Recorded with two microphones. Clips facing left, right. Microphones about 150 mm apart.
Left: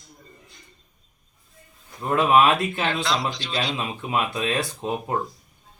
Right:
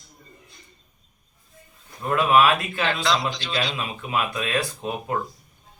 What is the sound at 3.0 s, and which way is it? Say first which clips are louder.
Speech: right 2 dB; 90° right.